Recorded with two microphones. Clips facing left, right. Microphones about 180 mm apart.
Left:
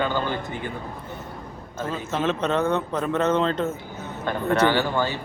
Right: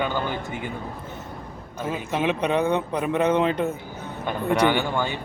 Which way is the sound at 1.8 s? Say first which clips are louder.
Right 1 dB; 15° right (ahead or behind).